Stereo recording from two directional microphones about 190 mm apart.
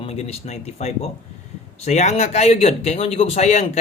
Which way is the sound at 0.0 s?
35° left (ahead or behind).